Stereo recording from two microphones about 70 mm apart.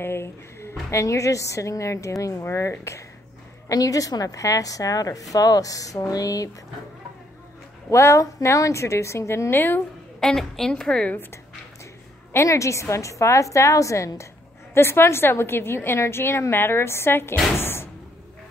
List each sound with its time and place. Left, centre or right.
0.0 s a woman's voice: left
3.6 s a woman's voice: left
7.9 s a woman's voice: left
10.2 s a woman's voice: centre
12.4 s a woman's voice: left
14.7 s a woman's voice: left